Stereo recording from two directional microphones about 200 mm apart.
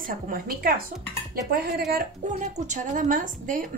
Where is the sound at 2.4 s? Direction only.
40° right (ahead or behind).